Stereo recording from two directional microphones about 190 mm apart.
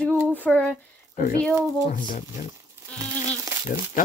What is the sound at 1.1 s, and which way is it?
Speech, 45° left (ahead or behind).